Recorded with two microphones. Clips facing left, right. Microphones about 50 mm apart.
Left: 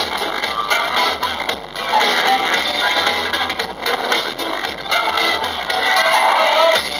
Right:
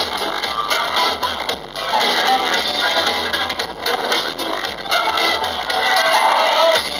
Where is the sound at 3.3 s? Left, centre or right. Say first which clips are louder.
Left 1 dB; centre.